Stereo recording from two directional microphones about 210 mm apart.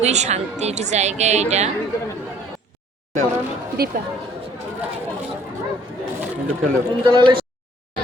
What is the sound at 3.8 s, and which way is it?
Speech, 45° right (ahead or behind).